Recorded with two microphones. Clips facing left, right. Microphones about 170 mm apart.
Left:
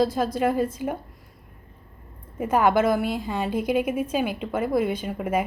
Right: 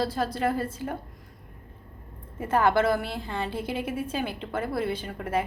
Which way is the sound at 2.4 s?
10° left (ahead or behind).